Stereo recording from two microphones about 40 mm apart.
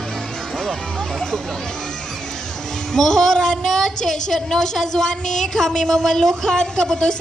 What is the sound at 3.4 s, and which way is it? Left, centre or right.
A woman's voice, centre.